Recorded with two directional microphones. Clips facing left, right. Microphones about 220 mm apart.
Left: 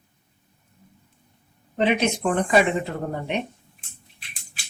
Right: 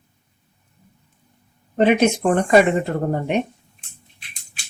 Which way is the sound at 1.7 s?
50° right (ahead or behind).